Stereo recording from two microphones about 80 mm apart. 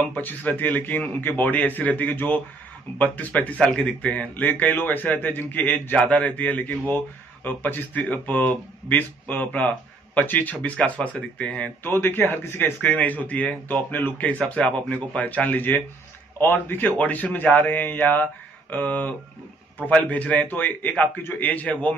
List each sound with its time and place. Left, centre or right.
0.1 s a man's voice: left
11.8 s a man's voice: left